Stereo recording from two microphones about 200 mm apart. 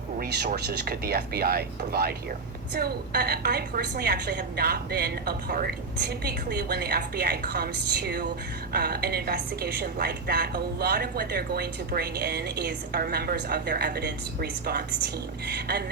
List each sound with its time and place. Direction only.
0.2 s a woman's voice: 50° right (ahead or behind)